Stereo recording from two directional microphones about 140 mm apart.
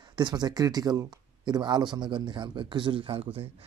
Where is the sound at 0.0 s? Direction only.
30° right (ahead or behind).